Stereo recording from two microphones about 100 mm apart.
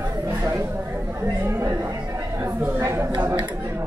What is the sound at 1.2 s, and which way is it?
Chatter, 25° right (ahead or behind).